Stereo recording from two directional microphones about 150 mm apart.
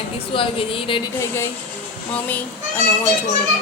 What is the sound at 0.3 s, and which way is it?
Speech, 35° left (ahead or behind).